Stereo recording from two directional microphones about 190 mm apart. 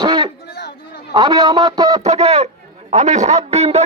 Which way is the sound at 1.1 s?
20° right (ahead or behind).